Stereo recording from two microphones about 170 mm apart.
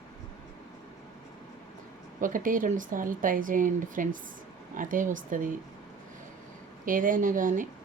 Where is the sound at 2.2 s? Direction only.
50° right (ahead or behind).